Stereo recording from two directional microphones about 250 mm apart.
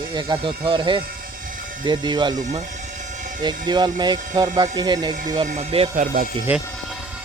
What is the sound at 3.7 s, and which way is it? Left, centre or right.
Speech, centre.